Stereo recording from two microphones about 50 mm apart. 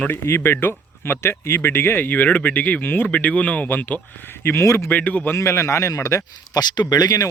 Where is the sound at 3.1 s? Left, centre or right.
Left.